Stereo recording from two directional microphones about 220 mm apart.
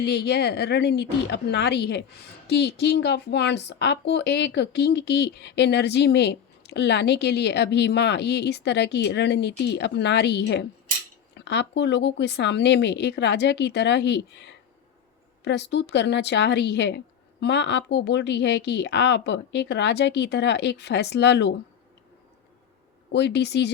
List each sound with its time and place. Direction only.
0.0 s a woman's voice: 50° left (ahead or behind)
23.1 s a woman's voice: 50° left (ahead or behind)